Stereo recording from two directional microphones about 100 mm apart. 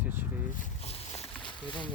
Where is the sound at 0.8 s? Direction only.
90° left.